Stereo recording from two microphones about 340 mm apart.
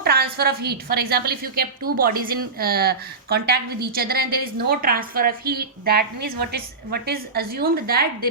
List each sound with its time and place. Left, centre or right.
0.0 s a woman's voice: right